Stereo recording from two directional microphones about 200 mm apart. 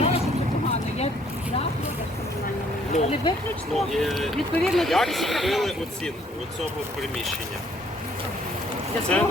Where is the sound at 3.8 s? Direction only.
Centre (ahead or behind).